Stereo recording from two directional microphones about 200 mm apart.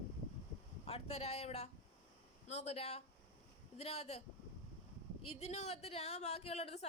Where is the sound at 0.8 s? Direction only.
30° left (ahead or behind).